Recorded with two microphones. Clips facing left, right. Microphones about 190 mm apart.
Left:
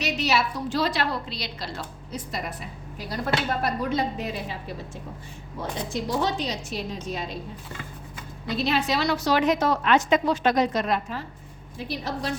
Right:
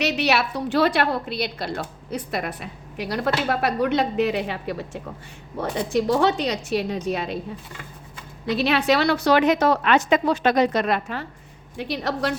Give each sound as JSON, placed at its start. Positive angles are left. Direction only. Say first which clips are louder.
{"t": 0.0, "sound": "a woman's voice", "louder": "right 3 dB", "side_deg": -65}
{"t": 6.1, "sound": "a woman's voice", "louder": "right 4 dB", "side_deg": -65}
{"t": 8.4, "sound": "a woman's voice", "louder": "right 5 dB", "side_deg": -70}